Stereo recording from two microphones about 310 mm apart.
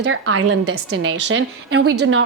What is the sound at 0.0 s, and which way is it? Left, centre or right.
A woman's voice, right.